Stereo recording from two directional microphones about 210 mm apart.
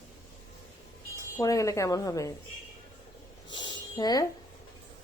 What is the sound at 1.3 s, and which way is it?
Speech, 15° left (ahead or behind).